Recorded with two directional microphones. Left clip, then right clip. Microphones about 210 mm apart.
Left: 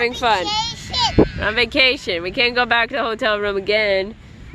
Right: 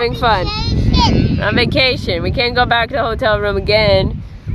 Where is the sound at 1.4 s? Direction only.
5° right (ahead or behind).